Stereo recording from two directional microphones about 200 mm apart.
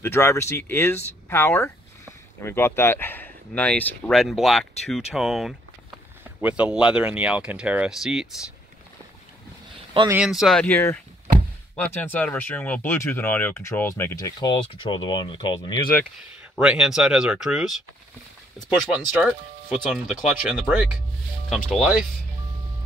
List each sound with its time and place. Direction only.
0.0 s speech: 10° left (ahead or behind)
10.0 s speech: 5° right (ahead or behind); by 15.8 s 20° left (ahead or behind)
16.5 s speech: 5° right (ahead or behind)
19.2 s speech: centre (ahead or behind)